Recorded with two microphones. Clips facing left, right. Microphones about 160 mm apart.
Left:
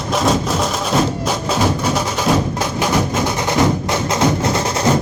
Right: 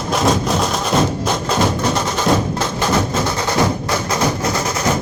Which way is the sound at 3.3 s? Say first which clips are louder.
Left 2 dB; 20° left (ahead or behind).